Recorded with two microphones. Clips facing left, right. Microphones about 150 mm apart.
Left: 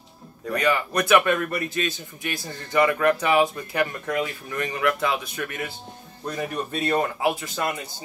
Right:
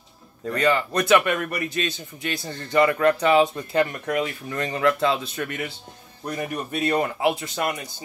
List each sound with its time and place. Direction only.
0.7 s speech: 20° right (ahead or behind)